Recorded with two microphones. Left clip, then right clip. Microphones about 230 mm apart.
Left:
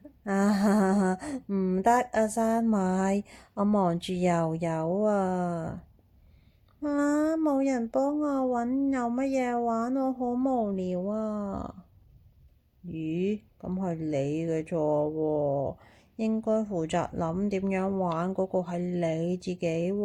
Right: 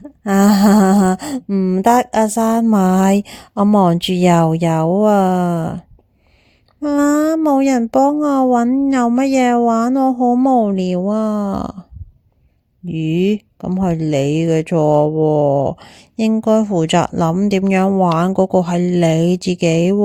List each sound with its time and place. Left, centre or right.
0.3 s speech: right
6.8 s speech: right
12.9 s speech: right